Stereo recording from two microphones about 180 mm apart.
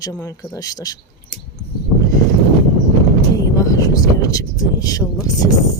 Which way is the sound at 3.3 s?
15° left (ahead or behind).